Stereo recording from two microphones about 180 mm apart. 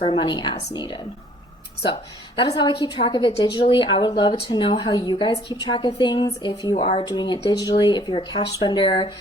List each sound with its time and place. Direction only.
0.0 s a woman's voice: 30° left (ahead or behind)
2.4 s a woman's voice: 25° left (ahead or behind)
6.7 s speech: 40° left (ahead or behind)
7.0 s a woman's voice: 25° left (ahead or behind)